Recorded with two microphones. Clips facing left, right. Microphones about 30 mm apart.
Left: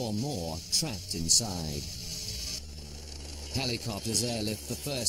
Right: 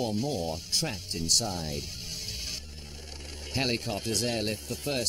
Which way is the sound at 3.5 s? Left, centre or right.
Right.